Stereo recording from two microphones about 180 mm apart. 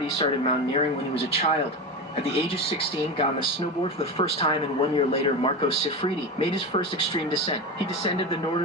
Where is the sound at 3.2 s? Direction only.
30° left (ahead or behind).